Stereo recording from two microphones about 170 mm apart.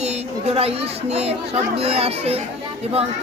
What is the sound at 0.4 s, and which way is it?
Speech, 35° right (ahead or behind).